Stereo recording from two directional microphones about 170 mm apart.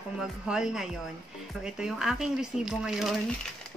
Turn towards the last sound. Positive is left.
turn(degrees=0)  # may be behind; listen again after turning